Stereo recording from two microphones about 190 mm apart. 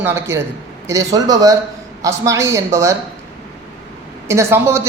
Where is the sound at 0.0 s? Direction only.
15° right (ahead or behind).